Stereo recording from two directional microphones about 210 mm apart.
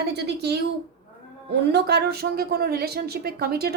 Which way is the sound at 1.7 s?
50° right (ahead or behind).